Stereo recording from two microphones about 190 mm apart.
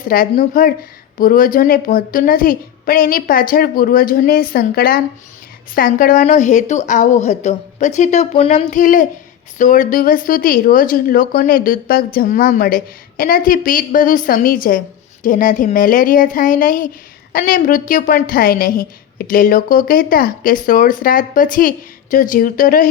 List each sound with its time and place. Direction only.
0.0 s a woman's voice: 50° left (ahead or behind)